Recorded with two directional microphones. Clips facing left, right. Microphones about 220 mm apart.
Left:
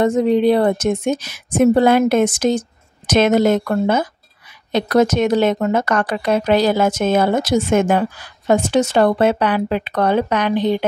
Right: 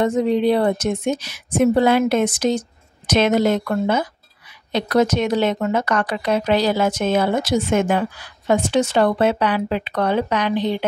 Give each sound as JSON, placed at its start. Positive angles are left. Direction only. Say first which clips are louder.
{"t": 0.0, "sound": "speech", "louder": "left 3 dB", "side_deg": 45}